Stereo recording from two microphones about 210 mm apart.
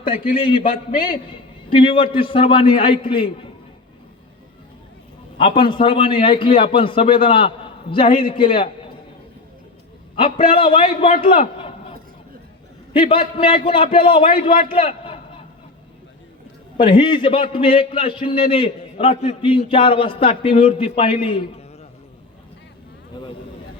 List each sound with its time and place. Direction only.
0.2 s a man's voice: 25° left (ahead or behind)
5.4 s a man's voice: 25° left (ahead or behind)
10.2 s a man's voice: 25° left (ahead or behind)
11.5 s a sound: 25° left (ahead or behind)
12.9 s a man's voice: 25° left (ahead or behind)
16.7 s a man's voice: 25° left (ahead or behind)
23.1 s a man's voice: 20° left (ahead or behind)